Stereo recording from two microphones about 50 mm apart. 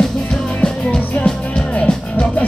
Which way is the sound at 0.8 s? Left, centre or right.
Left.